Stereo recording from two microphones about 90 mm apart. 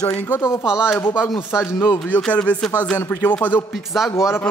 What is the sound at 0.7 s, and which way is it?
Speech, 10° right (ahead or behind).